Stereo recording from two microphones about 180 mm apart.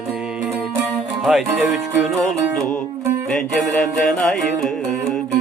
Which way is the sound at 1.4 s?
10° right (ahead or behind).